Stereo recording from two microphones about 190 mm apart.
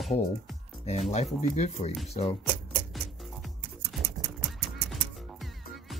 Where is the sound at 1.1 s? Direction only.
35° left (ahead or behind).